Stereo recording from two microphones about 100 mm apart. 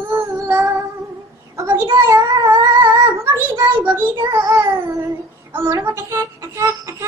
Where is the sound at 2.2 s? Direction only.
50° right (ahead or behind).